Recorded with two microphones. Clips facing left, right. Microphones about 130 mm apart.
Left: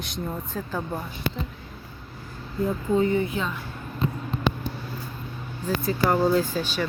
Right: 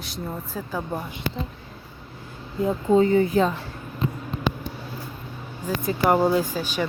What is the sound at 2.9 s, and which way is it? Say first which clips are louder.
Speech: right 6 dB; 35° right (ahead or behind).